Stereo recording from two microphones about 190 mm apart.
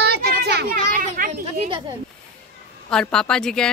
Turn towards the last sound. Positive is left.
turn(degrees=5)  # may be behind; listen again after turning